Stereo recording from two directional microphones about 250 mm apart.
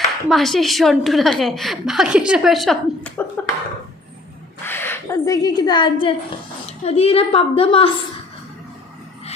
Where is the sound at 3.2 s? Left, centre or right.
Centre.